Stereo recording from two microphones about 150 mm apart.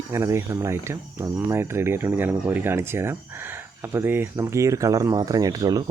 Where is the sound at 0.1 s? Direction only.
20° right (ahead or behind).